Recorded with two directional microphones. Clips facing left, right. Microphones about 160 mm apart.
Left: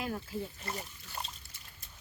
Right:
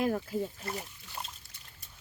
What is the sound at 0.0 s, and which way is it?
Speech, 50° right (ahead or behind).